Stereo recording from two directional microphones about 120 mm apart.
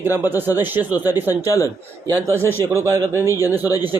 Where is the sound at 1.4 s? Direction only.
25° left (ahead or behind).